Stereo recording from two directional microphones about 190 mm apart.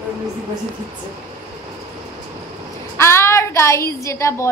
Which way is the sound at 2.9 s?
15° left (ahead or behind).